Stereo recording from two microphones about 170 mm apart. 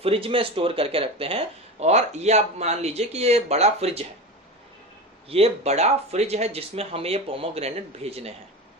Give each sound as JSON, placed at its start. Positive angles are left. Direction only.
{"t": 0.0, "sound": "speech", "side_deg": -35}
{"t": 5.3, "sound": "speech", "side_deg": -35}